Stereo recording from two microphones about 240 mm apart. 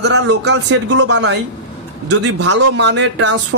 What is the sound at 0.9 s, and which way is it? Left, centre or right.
Speech, right.